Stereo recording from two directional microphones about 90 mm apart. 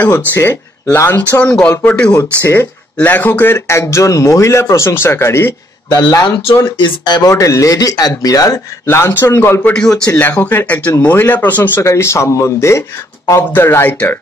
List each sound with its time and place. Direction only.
0.3 s speech: 25° left (ahead or behind)
2.1 s speech: 30° left (ahead or behind)
5.9 s speech: 50° left (ahead or behind)
8.8 s speech: 25° left (ahead or behind)
9.6 s a man's voice: 10° left (ahead or behind)